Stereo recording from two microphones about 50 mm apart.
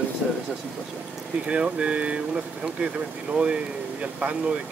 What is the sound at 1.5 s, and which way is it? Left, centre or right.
Speech, right.